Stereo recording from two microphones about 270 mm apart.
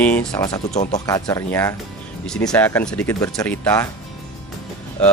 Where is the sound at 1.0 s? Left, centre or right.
Centre.